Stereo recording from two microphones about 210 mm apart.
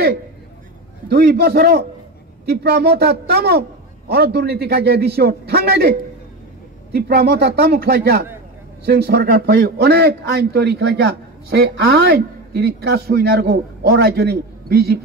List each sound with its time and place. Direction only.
1.0 s a man's voice: 45° right (ahead or behind)